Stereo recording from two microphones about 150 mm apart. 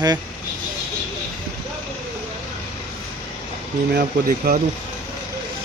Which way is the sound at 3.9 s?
80° right.